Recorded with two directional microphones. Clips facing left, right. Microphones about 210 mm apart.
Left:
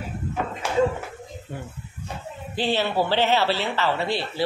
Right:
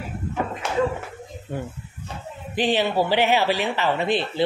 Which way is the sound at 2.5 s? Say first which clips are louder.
Right 2 dB; 15° right (ahead or behind).